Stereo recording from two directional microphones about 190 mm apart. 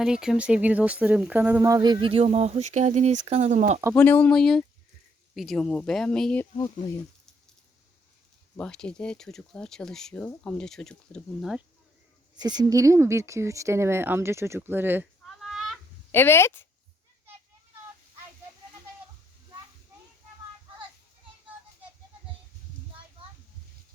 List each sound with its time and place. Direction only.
0.0 s speech: 5° right (ahead or behind); by 3.8 s 40° right (ahead or behind)
3.9 s speech: 10° left (ahead or behind)
6.6 s speech: 15° left (ahead or behind)
8.5 s speech: 5° left (ahead or behind)
12.4 s speech: 20° right (ahead or behind)
15.4 s a sound: centre (ahead or behind)
16.1 s speech: 10° left (ahead or behind)